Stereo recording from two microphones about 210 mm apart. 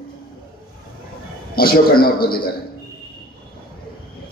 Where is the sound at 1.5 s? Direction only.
45° left (ahead or behind).